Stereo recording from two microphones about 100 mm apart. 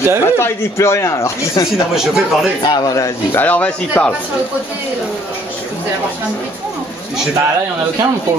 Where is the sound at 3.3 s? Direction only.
15° left (ahead or behind).